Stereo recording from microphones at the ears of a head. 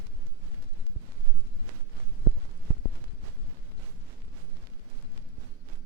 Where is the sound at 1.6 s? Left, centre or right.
Right.